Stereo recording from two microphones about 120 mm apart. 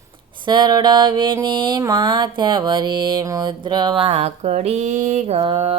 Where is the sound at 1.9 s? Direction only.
40° right (ahead or behind).